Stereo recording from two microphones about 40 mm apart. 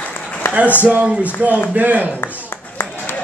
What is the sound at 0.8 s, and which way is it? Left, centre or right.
A man's voice, right.